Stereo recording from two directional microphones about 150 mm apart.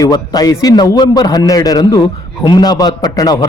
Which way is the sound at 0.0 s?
25° left (ahead or behind).